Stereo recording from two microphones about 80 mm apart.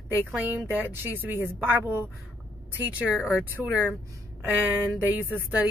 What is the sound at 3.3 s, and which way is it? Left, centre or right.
A woman's voice, centre.